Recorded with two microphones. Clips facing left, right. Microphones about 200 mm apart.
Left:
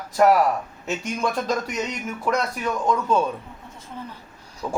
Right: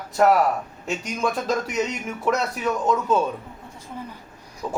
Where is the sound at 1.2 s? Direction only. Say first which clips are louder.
Right 1 dB; centre (ahead or behind).